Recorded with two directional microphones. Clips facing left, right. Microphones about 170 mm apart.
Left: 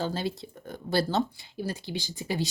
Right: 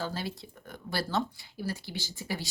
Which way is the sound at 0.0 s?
25° left (ahead or behind).